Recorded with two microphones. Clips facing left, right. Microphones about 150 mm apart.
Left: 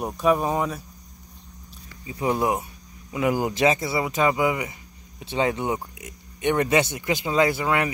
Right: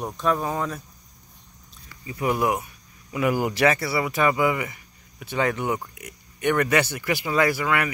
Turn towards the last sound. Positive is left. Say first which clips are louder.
# left 1 dB
turn(degrees=25)  # may be behind; listen again after turning